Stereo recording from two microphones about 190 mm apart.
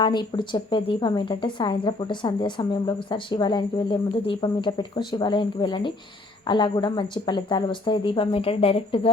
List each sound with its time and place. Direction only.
0.0 s a woman's voice: 25° left (ahead or behind)